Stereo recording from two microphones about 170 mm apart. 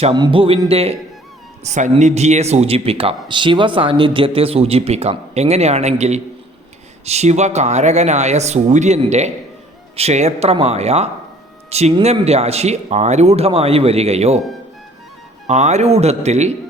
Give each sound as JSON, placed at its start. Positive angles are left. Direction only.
{"t": 0.0, "sound": "speech", "side_deg": -30}
{"t": 15.4, "sound": "speech", "side_deg": -40}